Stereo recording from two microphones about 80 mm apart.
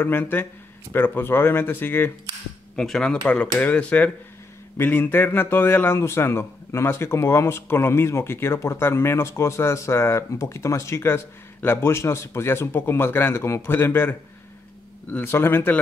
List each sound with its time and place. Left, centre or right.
0.0 s speech: left
2.7 s speech: centre; by 14.1 s left
15.2 s speech: left